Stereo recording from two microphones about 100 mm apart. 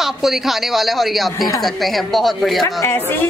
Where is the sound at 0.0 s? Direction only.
5° right (ahead or behind).